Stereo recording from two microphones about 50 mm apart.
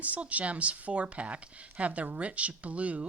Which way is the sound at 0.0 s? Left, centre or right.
Right.